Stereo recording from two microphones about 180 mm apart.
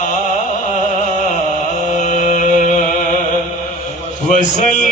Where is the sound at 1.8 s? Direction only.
45° left (ahead or behind).